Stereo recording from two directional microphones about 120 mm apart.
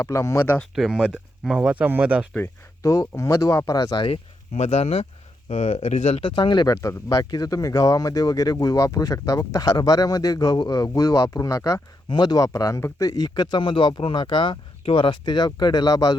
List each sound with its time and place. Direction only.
0.0 s speech: 25° left (ahead or behind)
0.8 s speech: 5° right (ahead or behind)
2.3 s speech: 20° left (ahead or behind)
4.5 s speech: 70° left (ahead or behind)
5.5 s speech: 75° left (ahead or behind)
6.2 s speech: 40° left (ahead or behind)
12.0 s speech: 35° left (ahead or behind)